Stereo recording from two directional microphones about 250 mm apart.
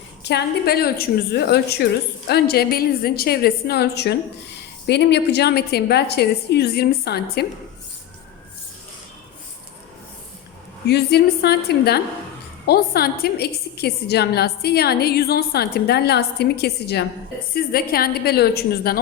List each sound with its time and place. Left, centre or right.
0.2 s a woman's voice: left
10.8 s a woman's voice: left